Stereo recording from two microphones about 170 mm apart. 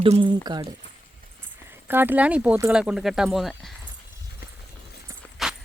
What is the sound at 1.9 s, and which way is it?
Speech, 10° right (ahead or behind).